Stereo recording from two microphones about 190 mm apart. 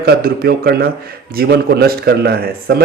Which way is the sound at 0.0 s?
55° right (ahead or behind).